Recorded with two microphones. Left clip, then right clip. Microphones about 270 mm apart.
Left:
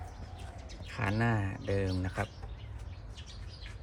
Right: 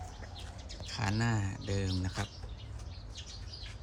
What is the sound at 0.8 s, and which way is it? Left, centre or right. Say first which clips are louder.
Speech: left 2 dB; centre.